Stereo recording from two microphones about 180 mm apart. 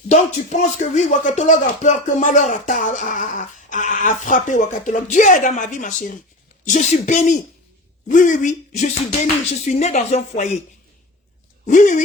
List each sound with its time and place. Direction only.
0.1 s speech: 40° left (ahead or behind)
11.6 s speech: 45° left (ahead or behind)